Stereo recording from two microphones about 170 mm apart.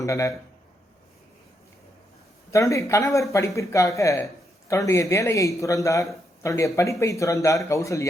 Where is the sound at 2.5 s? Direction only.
20° left (ahead or behind).